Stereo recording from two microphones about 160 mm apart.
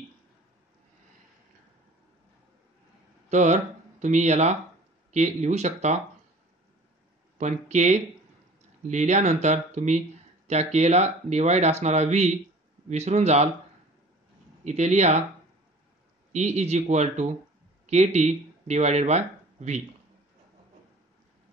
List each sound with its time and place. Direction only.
3.3 s speech: 45° right (ahead or behind)
7.3 s speech: 45° right (ahead or behind)
14.6 s speech: 45° right (ahead or behind)
16.3 s speech: 45° right (ahead or behind)